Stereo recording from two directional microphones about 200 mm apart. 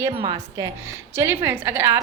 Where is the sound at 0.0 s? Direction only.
15° right (ahead or behind).